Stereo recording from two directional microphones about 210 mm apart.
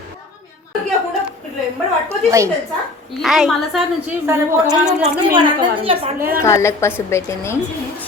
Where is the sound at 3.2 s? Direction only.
Centre (ahead or behind).